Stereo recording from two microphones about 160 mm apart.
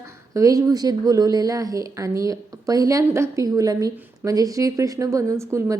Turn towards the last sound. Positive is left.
turn(degrees=-20)  # may be behind; listen again after turning